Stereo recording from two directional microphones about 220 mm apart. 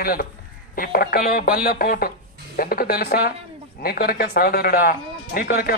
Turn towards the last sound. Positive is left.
turn(degrees=40)  # may be behind; listen again after turning